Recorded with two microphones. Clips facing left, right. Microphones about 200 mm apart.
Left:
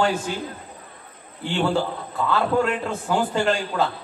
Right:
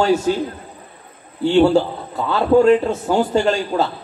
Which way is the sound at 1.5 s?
40° right (ahead or behind).